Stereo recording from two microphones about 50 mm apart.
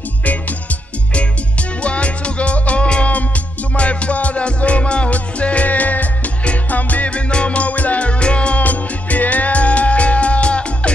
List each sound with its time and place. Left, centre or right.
0.2 s music: left